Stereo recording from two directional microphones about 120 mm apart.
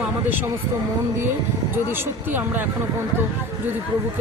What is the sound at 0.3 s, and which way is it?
Speech, 15° right (ahead or behind).